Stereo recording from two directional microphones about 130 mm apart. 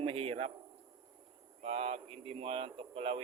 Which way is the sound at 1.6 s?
50° right (ahead or behind).